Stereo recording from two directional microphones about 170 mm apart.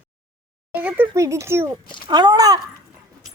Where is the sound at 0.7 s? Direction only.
10° right (ahead or behind).